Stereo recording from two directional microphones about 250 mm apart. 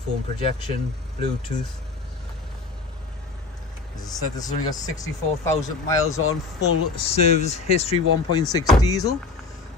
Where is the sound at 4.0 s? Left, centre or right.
Centre.